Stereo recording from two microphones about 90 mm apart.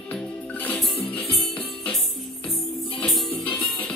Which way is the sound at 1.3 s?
5° left (ahead or behind).